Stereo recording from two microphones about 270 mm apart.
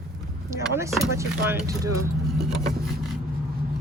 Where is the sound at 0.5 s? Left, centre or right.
Centre.